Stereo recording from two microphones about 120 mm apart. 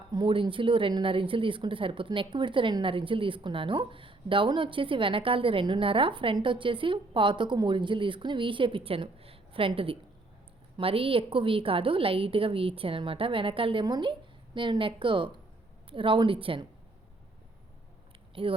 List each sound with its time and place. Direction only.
0.1 s a woman's voice: 40° right (ahead or behind)
18.4 s speech: 50° right (ahead or behind)